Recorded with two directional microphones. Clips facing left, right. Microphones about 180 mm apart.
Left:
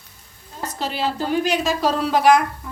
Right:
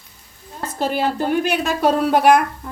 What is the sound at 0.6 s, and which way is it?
A woman's voice, 50° right (ahead or behind).